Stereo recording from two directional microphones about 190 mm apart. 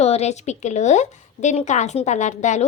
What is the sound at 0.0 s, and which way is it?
A woman's voice, 35° left (ahead or behind).